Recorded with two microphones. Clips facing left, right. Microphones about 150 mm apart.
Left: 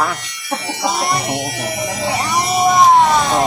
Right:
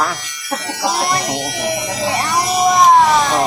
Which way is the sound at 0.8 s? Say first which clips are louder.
Right 1 dB; centre (ahead or behind).